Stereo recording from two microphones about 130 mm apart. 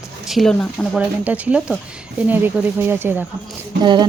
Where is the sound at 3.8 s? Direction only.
35° right (ahead or behind).